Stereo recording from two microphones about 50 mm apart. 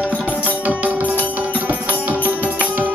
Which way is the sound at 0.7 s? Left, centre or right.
Right.